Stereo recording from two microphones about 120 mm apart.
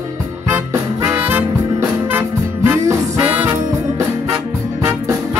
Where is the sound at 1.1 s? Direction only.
15° right (ahead or behind).